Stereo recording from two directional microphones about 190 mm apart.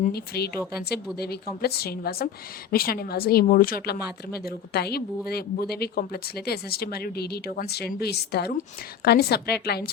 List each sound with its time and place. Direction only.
0.0 s a woman's voice: 55° left (ahead or behind)